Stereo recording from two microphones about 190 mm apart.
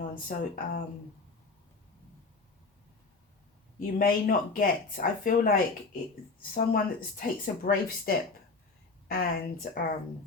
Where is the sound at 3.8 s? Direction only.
50° left (ahead or behind).